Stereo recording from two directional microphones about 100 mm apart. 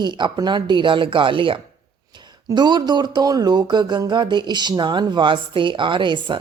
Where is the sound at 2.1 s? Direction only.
45° right (ahead or behind).